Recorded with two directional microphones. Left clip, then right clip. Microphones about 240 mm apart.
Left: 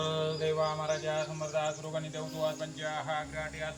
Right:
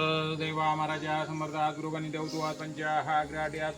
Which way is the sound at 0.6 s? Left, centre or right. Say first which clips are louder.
Right 2 dB; right.